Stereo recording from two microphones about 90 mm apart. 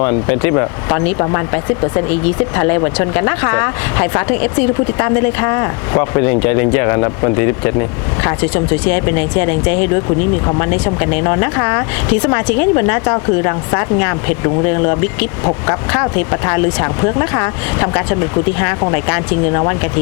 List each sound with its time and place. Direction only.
0.0 s speech: 25° left (ahead or behind)
6.4 s speech: 25° left (ahead or behind)